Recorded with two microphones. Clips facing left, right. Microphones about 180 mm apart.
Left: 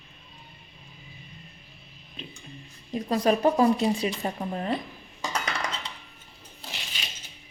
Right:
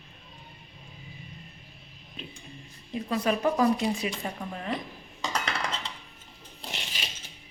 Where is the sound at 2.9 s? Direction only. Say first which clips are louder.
Left 4 dB; 35° left (ahead or behind).